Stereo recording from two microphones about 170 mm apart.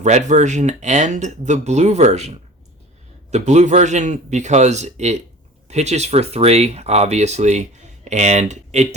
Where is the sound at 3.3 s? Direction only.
45° right (ahead or behind).